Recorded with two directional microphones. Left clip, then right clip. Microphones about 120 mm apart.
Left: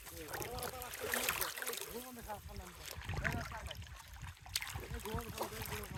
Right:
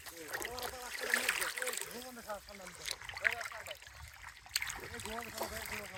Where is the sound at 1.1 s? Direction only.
50° left (ahead or behind).